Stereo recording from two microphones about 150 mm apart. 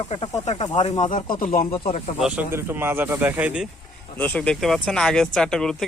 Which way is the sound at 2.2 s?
10° right (ahead or behind).